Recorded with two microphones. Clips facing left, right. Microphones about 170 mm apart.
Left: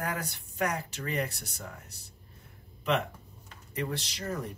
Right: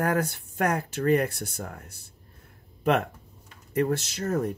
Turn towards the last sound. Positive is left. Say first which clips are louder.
# right 8 dB
turn(degrees=-50)  # may be behind; listen again after turning